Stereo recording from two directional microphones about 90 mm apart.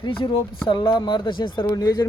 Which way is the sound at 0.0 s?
80° left.